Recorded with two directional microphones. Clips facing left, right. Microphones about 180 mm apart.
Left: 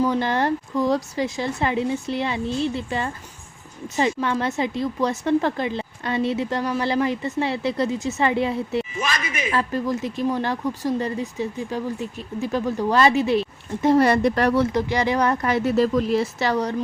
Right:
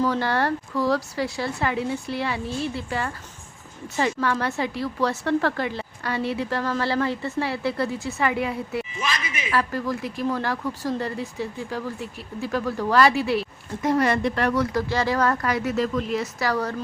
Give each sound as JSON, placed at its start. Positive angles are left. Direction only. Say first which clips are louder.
{"t": 0.0, "sound": "speech", "louder": "left 2 dB", "side_deg": 20}
{"t": 9.0, "sound": "a sound", "louder": "left 3 dB", "side_deg": 45}
{"t": 9.5, "sound": "speech", "louder": "left 1 dB", "side_deg": 20}